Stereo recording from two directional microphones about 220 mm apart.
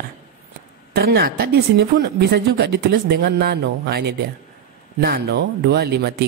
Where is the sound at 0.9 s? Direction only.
45° right (ahead or behind).